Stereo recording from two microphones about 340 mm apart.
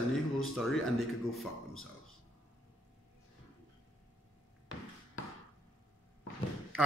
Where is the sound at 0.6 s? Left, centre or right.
Centre.